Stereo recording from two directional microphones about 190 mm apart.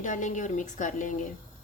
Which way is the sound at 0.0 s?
40° left (ahead or behind).